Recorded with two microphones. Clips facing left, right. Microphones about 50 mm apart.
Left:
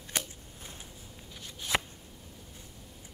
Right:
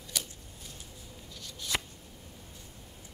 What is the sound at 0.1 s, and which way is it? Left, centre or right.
Scissors, left.